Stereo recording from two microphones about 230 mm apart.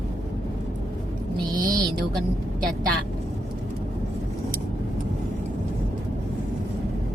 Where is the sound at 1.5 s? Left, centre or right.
Centre.